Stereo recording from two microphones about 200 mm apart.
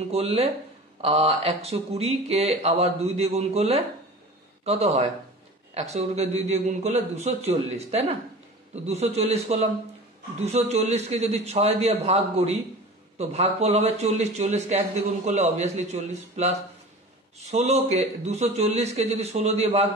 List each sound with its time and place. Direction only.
0.1 s speech: 30° right (ahead or behind)